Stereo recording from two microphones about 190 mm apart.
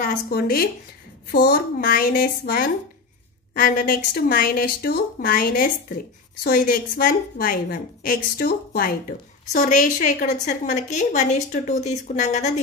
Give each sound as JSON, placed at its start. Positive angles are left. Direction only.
{"t": 0.0, "sound": "a woman's voice", "side_deg": 50}
{"t": 1.3, "sound": "a child's voice", "side_deg": 65}
{"t": 1.8, "sound": "a woman's voice", "side_deg": 50}
{"t": 9.5, "sound": "speech", "side_deg": 40}